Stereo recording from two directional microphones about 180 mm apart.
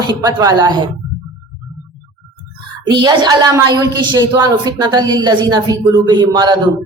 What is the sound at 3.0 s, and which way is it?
A woman's voice, 20° right (ahead or behind).